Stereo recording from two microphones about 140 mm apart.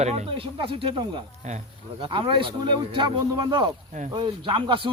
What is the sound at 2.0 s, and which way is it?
Speech, 35° right (ahead or behind).